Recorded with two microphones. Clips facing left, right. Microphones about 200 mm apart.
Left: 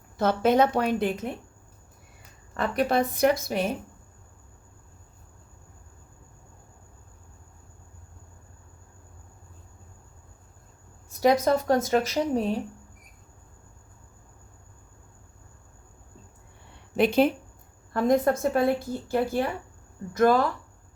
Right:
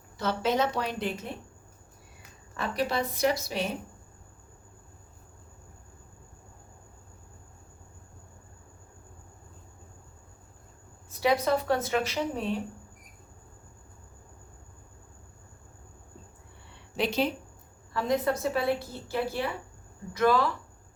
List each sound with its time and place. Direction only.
0.2 s a woman's voice: 50° left (ahead or behind)
2.6 s a woman's voice: 55° left (ahead or behind)
11.2 s a woman's voice: 45° left (ahead or behind)
16.9 s a woman's voice: 55° left (ahead or behind)